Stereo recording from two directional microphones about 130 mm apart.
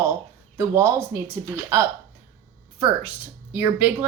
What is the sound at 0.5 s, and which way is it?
Speech, 20° right (ahead or behind).